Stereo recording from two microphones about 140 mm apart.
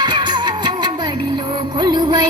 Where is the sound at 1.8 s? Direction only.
30° right (ahead or behind).